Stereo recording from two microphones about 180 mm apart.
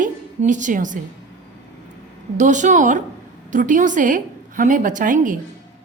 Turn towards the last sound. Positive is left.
turn(degrees=-45)  # may be behind; listen again after turning